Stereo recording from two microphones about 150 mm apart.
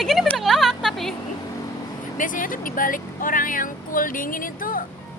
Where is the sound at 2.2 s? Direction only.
60° left (ahead or behind).